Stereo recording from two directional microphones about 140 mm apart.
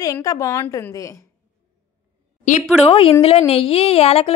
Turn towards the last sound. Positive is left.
turn(degrees=45)  # may be behind; listen again after turning